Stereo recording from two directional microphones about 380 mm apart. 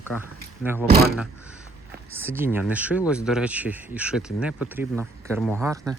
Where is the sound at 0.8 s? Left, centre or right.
Right.